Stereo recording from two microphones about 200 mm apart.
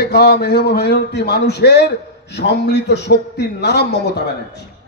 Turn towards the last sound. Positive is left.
turn(degrees=55)  # may be behind; listen again after turning